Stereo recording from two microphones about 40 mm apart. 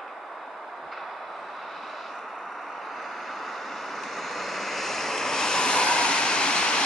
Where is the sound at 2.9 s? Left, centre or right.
Centre.